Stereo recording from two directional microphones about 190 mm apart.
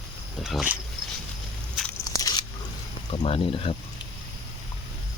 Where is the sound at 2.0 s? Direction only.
20° left (ahead or behind).